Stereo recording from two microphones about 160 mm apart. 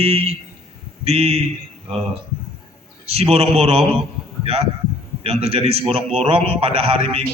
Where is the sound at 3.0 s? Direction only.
40° right (ahead or behind).